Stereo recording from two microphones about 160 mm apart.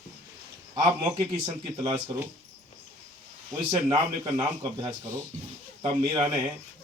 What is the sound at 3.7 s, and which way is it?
A man's voice, 25° right (ahead or behind).